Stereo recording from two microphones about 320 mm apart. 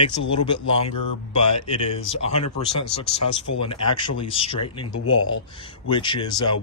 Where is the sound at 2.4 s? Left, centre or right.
Left.